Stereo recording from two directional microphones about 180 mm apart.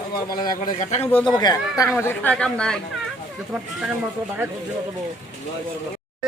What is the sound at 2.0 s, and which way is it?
Speech, 10° left (ahead or behind).